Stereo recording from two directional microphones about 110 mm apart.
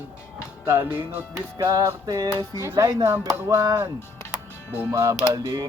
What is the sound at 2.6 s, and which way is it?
Speech, 30° right (ahead or behind).